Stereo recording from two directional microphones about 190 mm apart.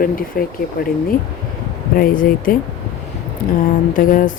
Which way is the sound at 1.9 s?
50° left (ahead or behind).